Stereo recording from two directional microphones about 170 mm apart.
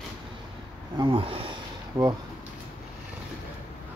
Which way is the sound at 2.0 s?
20° right (ahead or behind).